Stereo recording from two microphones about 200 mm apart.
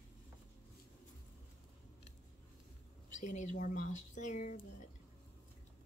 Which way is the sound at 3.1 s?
40° left (ahead or behind).